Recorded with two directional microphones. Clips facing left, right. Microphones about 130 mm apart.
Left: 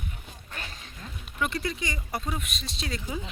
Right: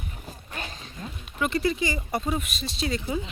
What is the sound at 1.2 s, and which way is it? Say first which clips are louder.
Speech: right 5 dB; centre (ahead or behind).